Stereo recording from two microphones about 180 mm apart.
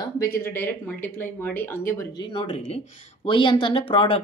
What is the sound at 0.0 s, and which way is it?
Speech, 15° left (ahead or behind).